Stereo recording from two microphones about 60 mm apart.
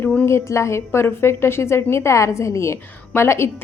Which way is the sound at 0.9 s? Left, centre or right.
Left.